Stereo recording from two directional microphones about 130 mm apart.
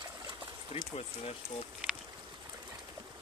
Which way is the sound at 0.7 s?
55° left (ahead or behind).